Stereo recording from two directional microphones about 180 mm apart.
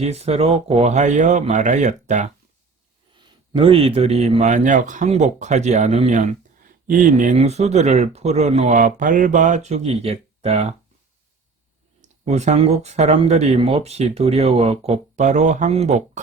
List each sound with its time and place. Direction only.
0.0 s speech: 35° right (ahead or behind)
3.2 s speech: 30° right (ahead or behind)
12.0 s speech: 40° right (ahead or behind)